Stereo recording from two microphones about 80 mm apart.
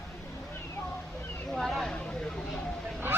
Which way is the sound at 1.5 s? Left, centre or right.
Centre.